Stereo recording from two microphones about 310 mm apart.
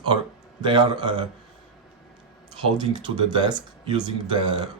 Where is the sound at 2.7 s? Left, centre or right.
Centre.